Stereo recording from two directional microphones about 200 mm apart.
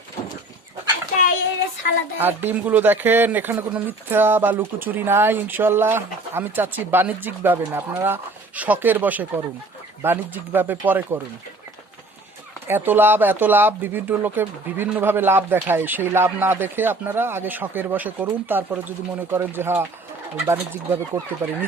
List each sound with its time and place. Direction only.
2.1 s speech: 10° right (ahead or behind)
12.6 s speech: 10° right (ahead or behind)